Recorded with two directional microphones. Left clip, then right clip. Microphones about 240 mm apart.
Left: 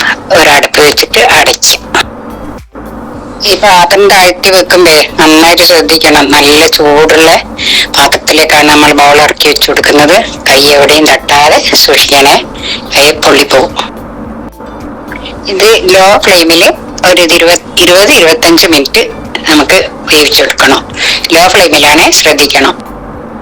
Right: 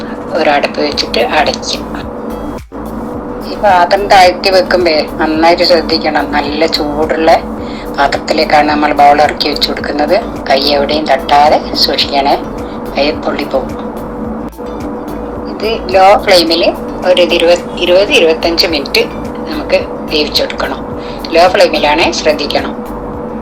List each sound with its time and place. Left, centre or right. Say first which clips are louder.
0.0 s a sound: left 8 dB; left
3.4 s speech: left 5 dB; left
15.5 s speech: left 7 dB; left